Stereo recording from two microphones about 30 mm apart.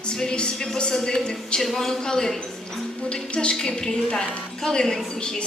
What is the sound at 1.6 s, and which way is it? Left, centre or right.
Speech, centre.